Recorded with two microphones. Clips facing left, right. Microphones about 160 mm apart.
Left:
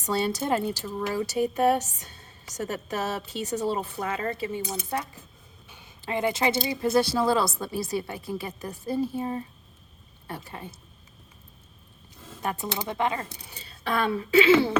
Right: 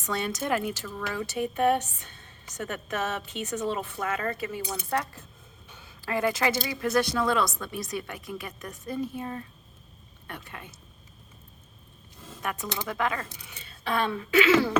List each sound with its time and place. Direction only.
0.0 s speech: 30° left (ahead or behind)
5.6 s a sound: 10° left (ahead or behind)
6.0 s speech: 25° left (ahead or behind)
12.4 s speech: 30° left (ahead or behind)